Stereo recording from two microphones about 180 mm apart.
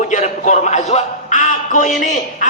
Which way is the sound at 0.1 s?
40° left (ahead or behind).